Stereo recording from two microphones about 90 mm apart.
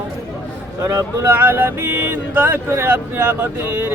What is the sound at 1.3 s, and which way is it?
Speech, 25° right (ahead or behind).